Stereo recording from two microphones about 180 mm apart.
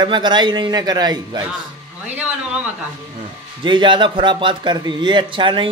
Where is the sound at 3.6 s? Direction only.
25° right (ahead or behind).